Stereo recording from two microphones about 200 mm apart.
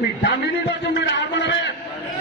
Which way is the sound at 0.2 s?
60° left (ahead or behind).